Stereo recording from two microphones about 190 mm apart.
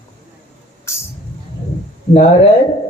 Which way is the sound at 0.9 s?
15° left (ahead or behind).